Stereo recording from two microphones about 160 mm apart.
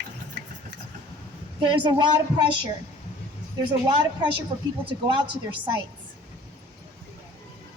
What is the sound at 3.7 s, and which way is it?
Speech, 30° right (ahead or behind).